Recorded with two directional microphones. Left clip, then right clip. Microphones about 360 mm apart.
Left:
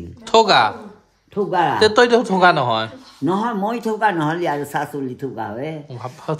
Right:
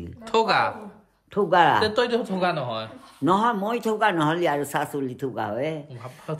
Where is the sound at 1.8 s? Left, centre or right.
Centre.